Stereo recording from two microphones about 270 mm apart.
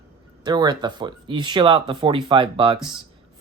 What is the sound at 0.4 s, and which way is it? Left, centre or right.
Speech, centre.